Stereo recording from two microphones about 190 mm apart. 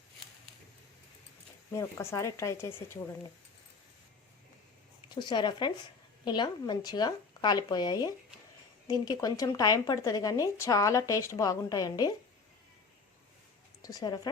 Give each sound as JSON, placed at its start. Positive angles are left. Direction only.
{"t": 1.7, "sound": "speech", "side_deg": 15}
{"t": 5.1, "sound": "speech", "side_deg": 25}
{"t": 13.8, "sound": "speech", "side_deg": 20}